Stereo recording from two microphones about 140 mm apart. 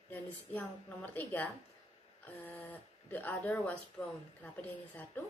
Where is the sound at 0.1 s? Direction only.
10° left (ahead or behind).